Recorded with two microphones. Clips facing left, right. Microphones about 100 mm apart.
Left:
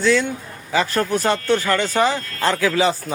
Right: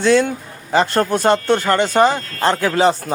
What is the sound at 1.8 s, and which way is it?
Speech, 45° right (ahead or behind).